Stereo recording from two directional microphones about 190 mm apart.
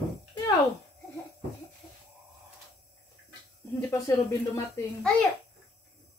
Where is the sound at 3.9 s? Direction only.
15° left (ahead or behind).